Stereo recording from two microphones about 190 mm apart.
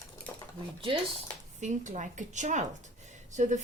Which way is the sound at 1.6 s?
40° right (ahead or behind).